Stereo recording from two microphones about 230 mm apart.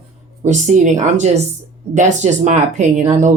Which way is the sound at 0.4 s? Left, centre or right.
Right.